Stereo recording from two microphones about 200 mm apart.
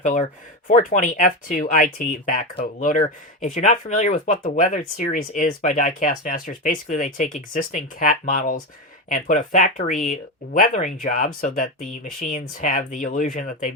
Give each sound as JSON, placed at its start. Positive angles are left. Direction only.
{"t": 0.0, "sound": "speech", "side_deg": 40}